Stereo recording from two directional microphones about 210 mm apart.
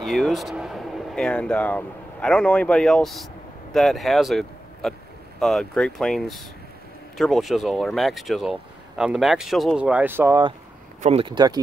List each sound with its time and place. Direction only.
0.0 s speech: centre (ahead or behind)
11.0 s speech: 30° right (ahead or behind)